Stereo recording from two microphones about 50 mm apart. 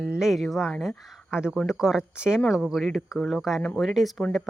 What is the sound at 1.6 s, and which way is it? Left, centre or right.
Speech, centre.